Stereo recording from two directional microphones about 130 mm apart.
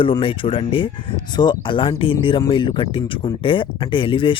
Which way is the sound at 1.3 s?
35° left (ahead or behind).